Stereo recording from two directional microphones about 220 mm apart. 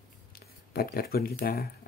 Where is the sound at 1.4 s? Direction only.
45° left (ahead or behind).